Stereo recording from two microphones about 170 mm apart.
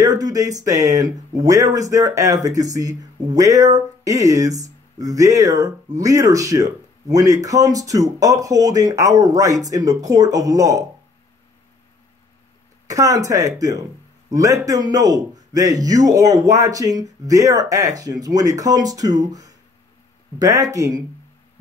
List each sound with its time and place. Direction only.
0.0 s speech: 20° right (ahead or behind)
12.8 s speech: 20° right (ahead or behind)